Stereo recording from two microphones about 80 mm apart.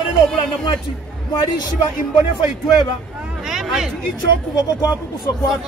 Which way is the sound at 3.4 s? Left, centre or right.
Centre.